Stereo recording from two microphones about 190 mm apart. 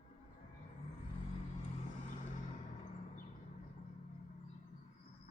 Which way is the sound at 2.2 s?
40° left (ahead or behind).